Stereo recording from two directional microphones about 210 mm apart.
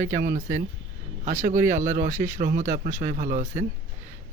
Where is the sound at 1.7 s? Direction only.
35° right (ahead or behind).